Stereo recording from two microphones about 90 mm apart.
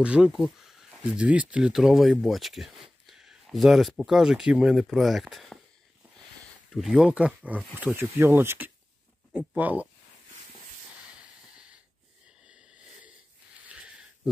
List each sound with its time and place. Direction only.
0.0 s speech: 10° right (ahead or behind)
6.7 s speech: centre (ahead or behind)
7.1 s speech: 15° right (ahead or behind)
11.5 s snort: 10° right (ahead or behind)
12.4 s a sound: 10° right (ahead or behind)
13.7 s sniff: 15° right (ahead or behind)